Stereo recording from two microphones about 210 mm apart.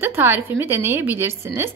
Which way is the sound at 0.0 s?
10° right (ahead or behind).